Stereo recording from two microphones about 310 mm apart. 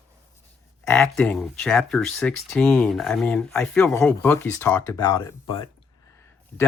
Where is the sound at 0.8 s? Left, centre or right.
Centre.